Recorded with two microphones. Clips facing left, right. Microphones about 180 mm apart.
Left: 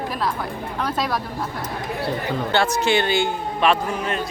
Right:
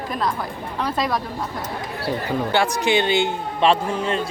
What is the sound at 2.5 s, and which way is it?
A man's voice, 15° right (ahead or behind).